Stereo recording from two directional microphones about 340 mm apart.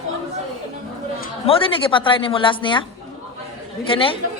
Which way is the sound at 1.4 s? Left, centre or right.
Centre.